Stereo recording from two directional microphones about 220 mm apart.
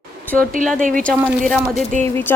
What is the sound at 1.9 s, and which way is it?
Speech, 35° right (ahead or behind).